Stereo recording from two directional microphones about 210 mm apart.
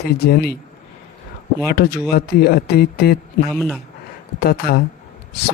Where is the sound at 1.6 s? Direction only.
50° left (ahead or behind).